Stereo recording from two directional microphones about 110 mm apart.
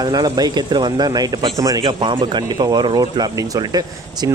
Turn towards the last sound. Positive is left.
turn(degrees=-35)  # may be behind; listen again after turning